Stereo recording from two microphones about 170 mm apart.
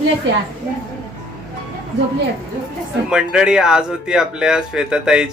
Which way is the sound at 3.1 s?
5° right (ahead or behind).